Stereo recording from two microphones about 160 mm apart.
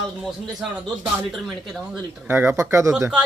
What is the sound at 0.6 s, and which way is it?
Speech, 5° right (ahead or behind).